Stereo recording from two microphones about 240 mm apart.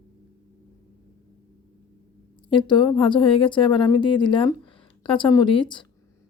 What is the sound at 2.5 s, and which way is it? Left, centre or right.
A woman's voice, centre.